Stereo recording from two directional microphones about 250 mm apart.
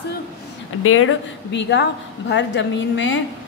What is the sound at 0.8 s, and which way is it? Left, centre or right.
A woman's voice, left.